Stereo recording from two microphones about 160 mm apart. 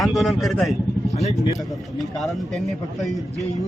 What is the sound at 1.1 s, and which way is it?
Speech, 45° left (ahead or behind).